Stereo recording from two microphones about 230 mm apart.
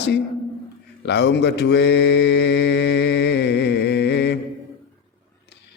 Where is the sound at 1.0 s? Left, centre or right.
Left.